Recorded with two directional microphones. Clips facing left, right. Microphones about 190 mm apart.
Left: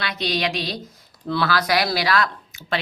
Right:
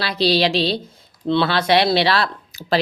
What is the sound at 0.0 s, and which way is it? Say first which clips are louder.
Speech: right 7 dB; 30° right (ahead or behind).